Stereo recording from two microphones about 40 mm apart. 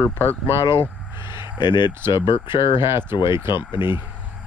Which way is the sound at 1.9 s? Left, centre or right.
Right.